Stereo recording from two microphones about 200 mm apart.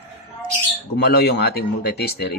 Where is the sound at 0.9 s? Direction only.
55° left (ahead or behind).